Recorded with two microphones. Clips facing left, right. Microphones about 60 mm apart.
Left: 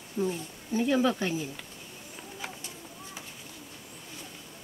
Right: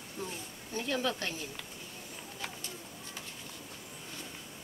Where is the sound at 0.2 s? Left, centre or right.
Centre.